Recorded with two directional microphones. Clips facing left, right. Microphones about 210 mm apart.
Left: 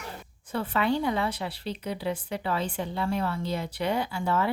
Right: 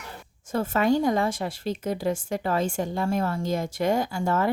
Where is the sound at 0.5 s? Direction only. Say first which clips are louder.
Right 4 dB; 45° right (ahead or behind).